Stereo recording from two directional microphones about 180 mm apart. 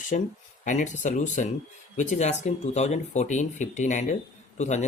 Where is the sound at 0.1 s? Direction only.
45° left (ahead or behind).